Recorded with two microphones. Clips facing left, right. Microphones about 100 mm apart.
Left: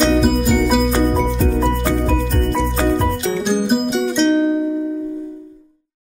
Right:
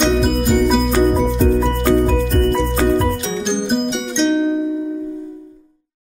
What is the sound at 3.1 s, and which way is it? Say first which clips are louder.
Music: left 1 dB; 5° left (ahead or behind).